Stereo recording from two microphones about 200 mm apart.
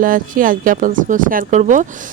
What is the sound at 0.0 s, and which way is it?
Speech, 45° right (ahead or behind).